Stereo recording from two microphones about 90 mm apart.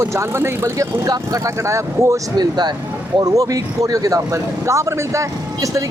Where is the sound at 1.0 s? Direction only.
45° right (ahead or behind).